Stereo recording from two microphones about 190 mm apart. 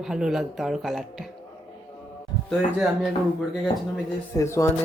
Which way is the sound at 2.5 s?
Centre (ahead or behind).